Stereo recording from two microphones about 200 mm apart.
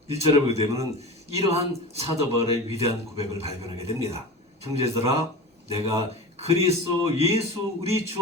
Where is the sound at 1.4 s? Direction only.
30° right (ahead or behind).